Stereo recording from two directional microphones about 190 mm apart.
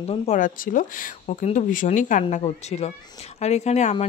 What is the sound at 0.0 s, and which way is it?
Speech, 30° left (ahead or behind).